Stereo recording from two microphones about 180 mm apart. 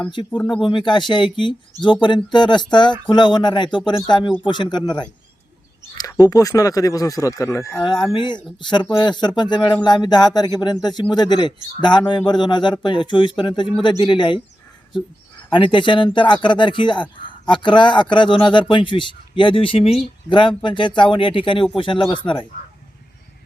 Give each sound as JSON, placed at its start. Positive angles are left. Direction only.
{"t": 0.3, "sound": "speech", "side_deg": 10}
{"t": 0.6, "sound": "a man's voice", "side_deg": 25}
{"t": 5.9, "sound": "a sound", "side_deg": 20}
{"t": 6.2, "sound": "a man's voice", "side_deg": 20}
{"t": 15.4, "sound": "a man's voice", "side_deg": 25}